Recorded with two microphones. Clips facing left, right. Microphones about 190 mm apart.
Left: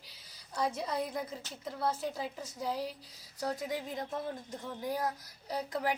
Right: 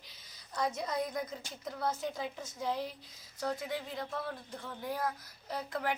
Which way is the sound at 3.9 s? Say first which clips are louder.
Left 2 dB; 20° left (ahead or behind).